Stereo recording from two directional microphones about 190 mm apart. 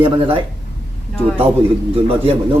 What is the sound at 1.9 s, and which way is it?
Speech, 30° right (ahead or behind).